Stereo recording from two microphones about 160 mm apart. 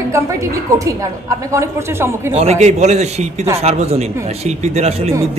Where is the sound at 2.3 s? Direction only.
40° right (ahead or behind).